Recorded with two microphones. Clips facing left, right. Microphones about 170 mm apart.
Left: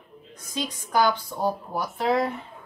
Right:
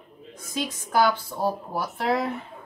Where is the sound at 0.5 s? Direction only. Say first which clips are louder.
Right 1 dB; 5° right (ahead or behind).